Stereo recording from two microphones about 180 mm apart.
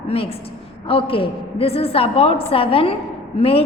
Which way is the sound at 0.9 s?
30° left (ahead or behind).